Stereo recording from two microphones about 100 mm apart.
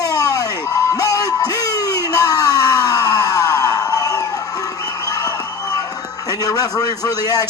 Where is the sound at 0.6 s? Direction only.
30° left (ahead or behind).